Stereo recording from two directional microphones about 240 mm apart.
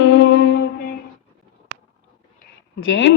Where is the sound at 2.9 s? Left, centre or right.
Left.